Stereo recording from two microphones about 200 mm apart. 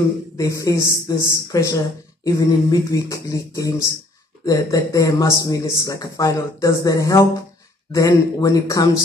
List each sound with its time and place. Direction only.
0.4 s speech: 15° left (ahead or behind)